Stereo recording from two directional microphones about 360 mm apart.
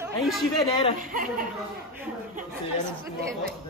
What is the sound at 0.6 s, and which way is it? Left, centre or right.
Speech, centre.